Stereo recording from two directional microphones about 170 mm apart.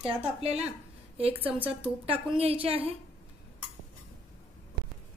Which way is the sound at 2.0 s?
35° right (ahead or behind).